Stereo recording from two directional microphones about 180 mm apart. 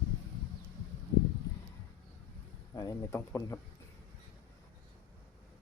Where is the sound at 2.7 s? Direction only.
20° left (ahead or behind).